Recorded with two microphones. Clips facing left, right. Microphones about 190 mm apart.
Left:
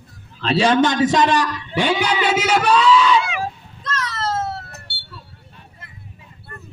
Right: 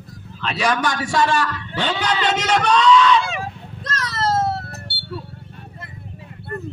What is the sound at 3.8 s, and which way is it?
Cat, 35° right (ahead or behind).